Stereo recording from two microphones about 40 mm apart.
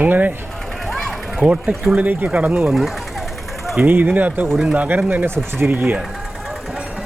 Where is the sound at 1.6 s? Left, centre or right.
Right.